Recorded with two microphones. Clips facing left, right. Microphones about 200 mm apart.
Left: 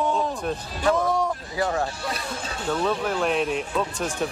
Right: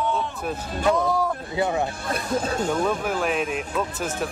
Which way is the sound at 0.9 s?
Centre (ahead or behind).